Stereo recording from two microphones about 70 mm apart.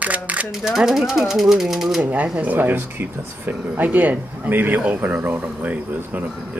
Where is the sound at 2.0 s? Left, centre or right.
Centre.